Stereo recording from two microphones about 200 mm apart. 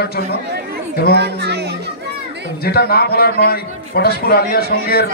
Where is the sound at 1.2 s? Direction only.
55° right (ahead or behind).